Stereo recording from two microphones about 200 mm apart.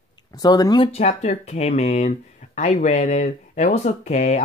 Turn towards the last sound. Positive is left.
turn(degrees=35)  # may be behind; listen again after turning